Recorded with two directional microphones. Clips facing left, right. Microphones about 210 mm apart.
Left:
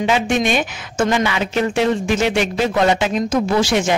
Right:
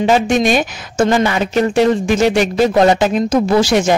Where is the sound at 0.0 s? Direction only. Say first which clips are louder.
Right 4 dB; 40° right (ahead or behind).